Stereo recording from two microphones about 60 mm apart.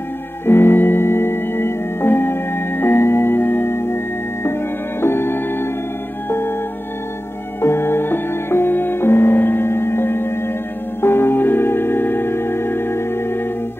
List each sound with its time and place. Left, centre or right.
0.5 s organ: left
5.0 s music: left
7.6 s music: left